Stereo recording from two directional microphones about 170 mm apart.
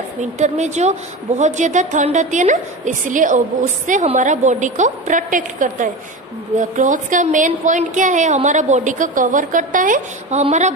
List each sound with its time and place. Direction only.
0.2 s a woman's voice: 45° right (ahead or behind)